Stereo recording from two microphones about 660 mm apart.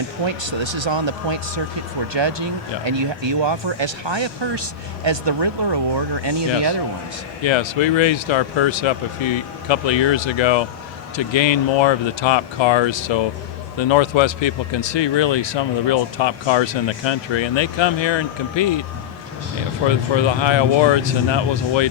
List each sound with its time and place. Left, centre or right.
0.3 s speech: right
7.4 s speech: left
19.9 s speech: left